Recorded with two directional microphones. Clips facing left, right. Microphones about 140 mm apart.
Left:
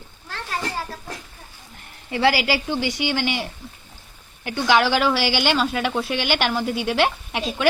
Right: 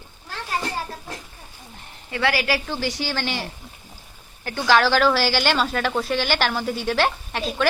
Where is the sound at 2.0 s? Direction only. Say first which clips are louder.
Left 3 dB; 25° left (ahead or behind).